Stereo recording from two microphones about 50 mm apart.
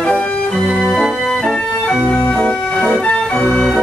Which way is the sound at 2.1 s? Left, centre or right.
Left.